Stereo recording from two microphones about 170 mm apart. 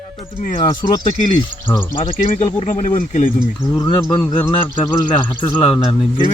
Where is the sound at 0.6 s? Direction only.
25° left (ahead or behind).